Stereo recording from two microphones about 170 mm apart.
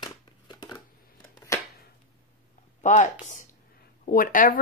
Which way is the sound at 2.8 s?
45° left (ahead or behind).